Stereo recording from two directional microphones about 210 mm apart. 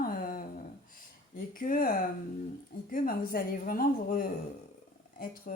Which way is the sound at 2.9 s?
45° left (ahead or behind).